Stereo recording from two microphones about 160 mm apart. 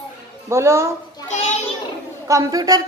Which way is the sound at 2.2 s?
20° right (ahead or behind).